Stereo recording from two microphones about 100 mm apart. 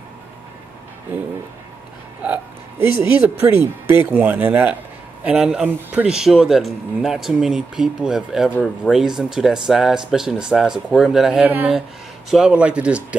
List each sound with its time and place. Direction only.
2.2 s a man's voice: 15° right (ahead or behind)
6.0 s speech: 5° right (ahead or behind)
8.5 s speech: 15° left (ahead or behind)
8.9 s speech: 5° right (ahead or behind)
11.4 s a man's voice: 15° right (ahead or behind)